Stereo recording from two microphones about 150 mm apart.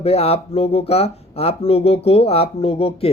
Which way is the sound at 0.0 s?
45° left (ahead or behind).